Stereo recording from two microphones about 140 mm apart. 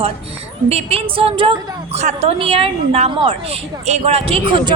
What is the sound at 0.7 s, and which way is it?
A woman's voice, 45° right (ahead or behind).